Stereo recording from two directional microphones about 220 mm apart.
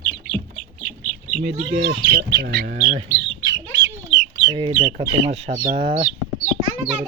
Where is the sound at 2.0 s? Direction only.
50° right (ahead or behind).